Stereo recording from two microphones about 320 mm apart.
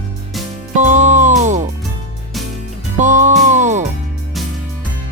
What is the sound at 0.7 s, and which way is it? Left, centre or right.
Music, right.